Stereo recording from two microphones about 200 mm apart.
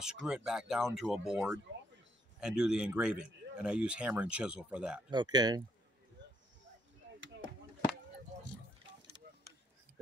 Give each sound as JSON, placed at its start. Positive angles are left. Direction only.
{"t": 0.0, "sound": "speech", "side_deg": -5}
{"t": 5.1, "sound": "speech", "side_deg": -20}